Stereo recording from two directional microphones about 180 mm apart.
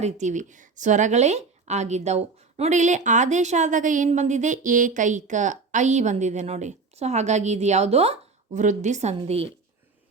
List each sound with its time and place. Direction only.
0.0 s a woman's voice: 40° right (ahead or behind)